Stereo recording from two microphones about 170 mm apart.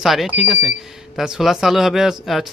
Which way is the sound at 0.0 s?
Centre (ahead or behind).